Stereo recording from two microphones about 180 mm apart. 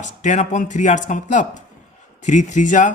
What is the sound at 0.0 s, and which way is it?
A man's voice, 45° left (ahead or behind).